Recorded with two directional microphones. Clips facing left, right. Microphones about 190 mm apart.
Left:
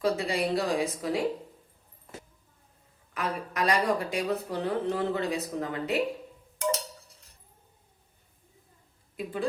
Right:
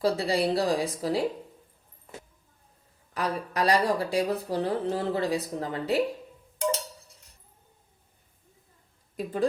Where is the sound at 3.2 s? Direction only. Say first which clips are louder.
Right 2 dB; 35° right (ahead or behind).